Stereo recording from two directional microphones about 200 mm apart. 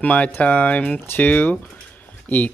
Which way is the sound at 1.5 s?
5° left (ahead or behind).